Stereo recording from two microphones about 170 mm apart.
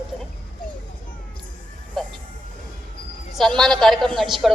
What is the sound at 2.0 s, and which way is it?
Music, 5° left (ahead or behind).